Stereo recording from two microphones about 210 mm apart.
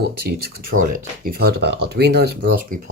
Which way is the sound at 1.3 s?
50° right (ahead or behind).